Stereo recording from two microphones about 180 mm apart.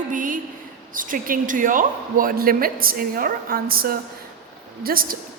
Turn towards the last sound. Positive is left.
turn(degrees=-55)  # may be behind; listen again after turning